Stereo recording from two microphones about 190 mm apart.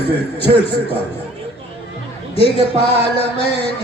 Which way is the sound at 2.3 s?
30° left (ahead or behind).